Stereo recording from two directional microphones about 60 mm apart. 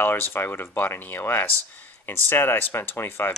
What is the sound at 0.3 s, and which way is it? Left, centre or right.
Speech, left.